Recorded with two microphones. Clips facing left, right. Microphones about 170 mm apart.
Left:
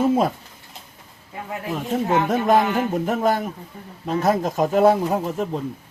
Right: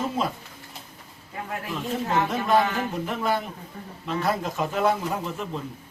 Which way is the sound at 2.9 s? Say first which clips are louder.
Left 6 dB; 45° left (ahead or behind).